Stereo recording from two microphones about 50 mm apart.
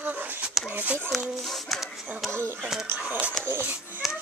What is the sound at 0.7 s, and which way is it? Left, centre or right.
Speech, right.